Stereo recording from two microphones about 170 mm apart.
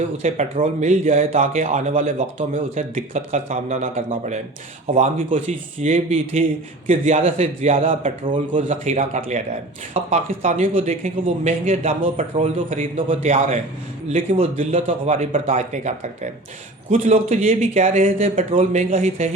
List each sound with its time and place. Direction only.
0.2 s a man's voice: 45° right (ahead or behind)
8.7 s a man's voice: 45° right (ahead or behind)